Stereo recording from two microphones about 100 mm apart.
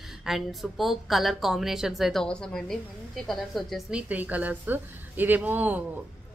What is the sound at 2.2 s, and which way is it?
Speech, 10° left (ahead or behind).